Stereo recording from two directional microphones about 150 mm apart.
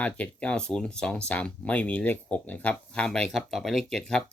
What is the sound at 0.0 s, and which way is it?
Speech, 10° left (ahead or behind).